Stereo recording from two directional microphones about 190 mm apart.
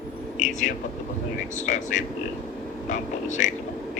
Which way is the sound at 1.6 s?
40° left (ahead or behind).